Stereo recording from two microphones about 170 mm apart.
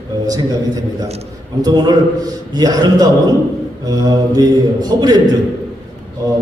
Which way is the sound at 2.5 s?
25° right (ahead or behind).